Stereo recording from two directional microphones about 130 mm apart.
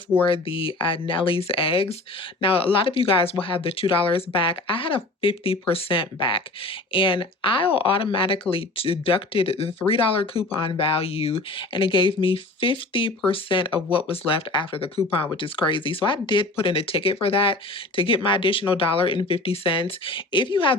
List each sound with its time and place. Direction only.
0.3 s speech: 45° left (ahead or behind)